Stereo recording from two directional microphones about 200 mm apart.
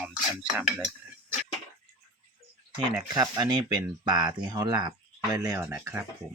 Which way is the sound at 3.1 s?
20° right (ahead or behind).